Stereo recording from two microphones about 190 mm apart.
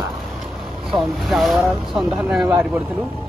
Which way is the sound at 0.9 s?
Centre (ahead or behind).